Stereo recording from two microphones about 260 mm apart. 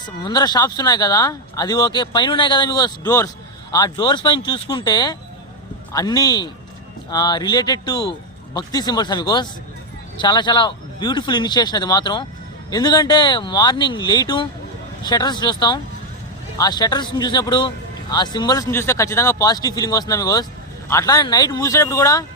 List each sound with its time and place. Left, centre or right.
0.2 s speech: centre